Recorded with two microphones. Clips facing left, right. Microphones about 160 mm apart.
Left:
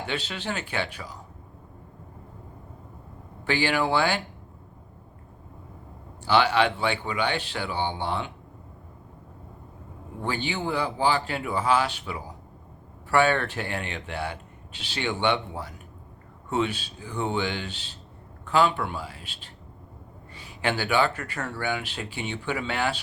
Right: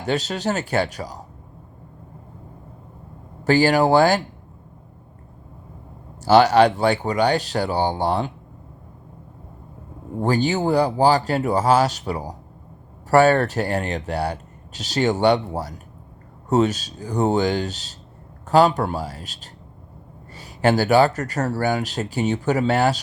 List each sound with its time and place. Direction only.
0.0 s speech: 40° right (ahead or behind)
3.4 s speech: 40° right (ahead or behind)
6.2 s speech: 40° right (ahead or behind)
10.2 s speech: 40° right (ahead or behind)